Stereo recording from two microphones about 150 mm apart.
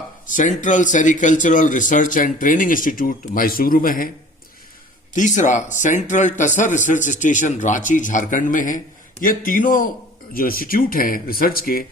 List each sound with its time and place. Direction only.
0.3 s speech: 60° left (ahead or behind)
5.1 s speech: 55° left (ahead or behind); by 11.9 s 75° left (ahead or behind)